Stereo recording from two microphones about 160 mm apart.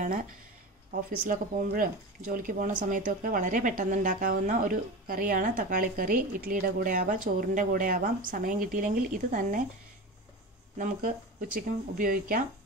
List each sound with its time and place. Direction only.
0.0 s speech: 55° right (ahead or behind)
10.8 s speech: 65° right (ahead or behind)